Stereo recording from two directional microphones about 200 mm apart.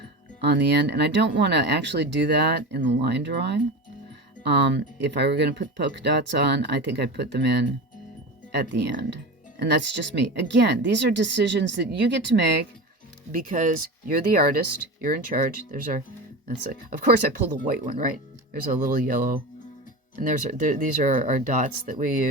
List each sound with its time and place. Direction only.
0.4 s speech: 55° right (ahead or behind)
9.6 s speech: 60° right (ahead or behind)
13.3 s speech: 40° right (ahead or behind)